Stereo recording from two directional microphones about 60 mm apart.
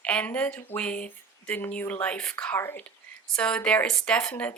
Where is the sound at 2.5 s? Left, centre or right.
Left.